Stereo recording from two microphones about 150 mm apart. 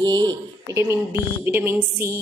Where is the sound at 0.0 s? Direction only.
30° right (ahead or behind).